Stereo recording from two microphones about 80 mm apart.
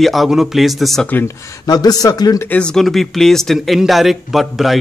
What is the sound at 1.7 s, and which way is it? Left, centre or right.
Speech, left.